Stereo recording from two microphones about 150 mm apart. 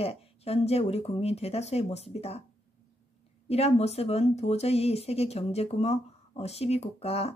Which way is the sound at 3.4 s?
45° left (ahead or behind).